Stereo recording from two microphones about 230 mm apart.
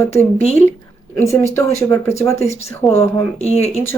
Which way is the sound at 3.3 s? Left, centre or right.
Left.